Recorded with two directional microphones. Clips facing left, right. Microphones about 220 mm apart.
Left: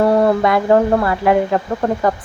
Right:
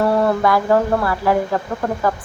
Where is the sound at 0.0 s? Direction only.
20° left (ahead or behind).